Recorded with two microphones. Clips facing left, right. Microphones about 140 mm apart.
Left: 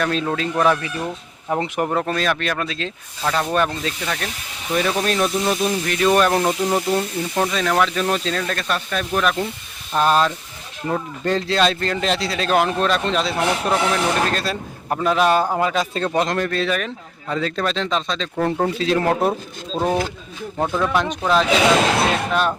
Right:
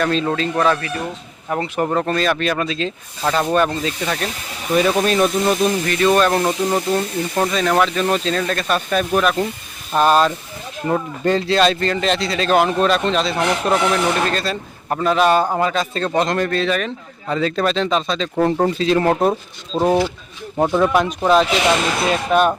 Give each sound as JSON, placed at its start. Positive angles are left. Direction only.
{"t": 0.0, "sound": "speech", "side_deg": 5}
{"t": 1.9, "sound": "speech", "side_deg": 5}
{"t": 8.7, "sound": "speech", "side_deg": -15}
{"t": 9.9, "sound": "speech", "side_deg": -5}
{"t": 20.6, "sound": "speech", "side_deg": -20}
{"t": 20.9, "sound": "speech", "side_deg": -5}
{"t": 22.3, "sound": "speech", "side_deg": -15}